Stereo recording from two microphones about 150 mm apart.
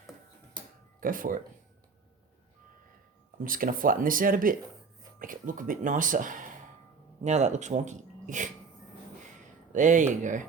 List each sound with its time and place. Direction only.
1.0 s speech: 65° right (ahead or behind)
3.4 s speech: 65° right (ahead or behind)
7.3 s speech: 50° right (ahead or behind)
9.7 s speech: 60° right (ahead or behind)